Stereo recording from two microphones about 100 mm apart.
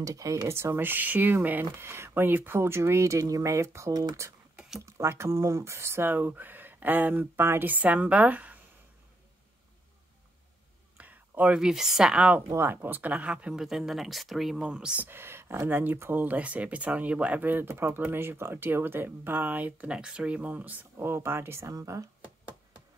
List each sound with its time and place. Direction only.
0.0 s speech: 35° right (ahead or behind)
4.6 s a sound: 5° right (ahead or behind)
4.8 s speech: 25° right (ahead or behind)
11.0 s speech: 15° right (ahead or behind)
12.4 s speech: 25° right (ahead or behind)
15.0 s speech: 25° right (ahead or behind)
22.2 s knock: 10° right (ahead or behind)